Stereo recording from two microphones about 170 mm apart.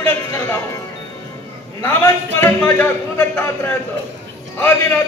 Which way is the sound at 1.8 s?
15° left (ahead or behind).